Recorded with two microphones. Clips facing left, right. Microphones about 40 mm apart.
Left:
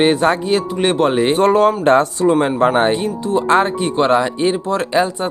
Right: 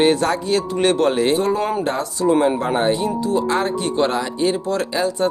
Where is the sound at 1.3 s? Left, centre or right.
Left.